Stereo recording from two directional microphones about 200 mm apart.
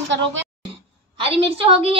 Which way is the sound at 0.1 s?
65° right (ahead or behind).